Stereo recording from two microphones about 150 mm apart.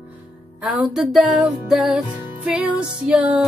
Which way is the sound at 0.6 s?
5° right (ahead or behind).